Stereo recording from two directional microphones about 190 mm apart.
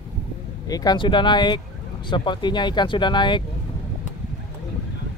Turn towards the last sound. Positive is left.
turn(degrees=25)  # may be behind; listen again after turning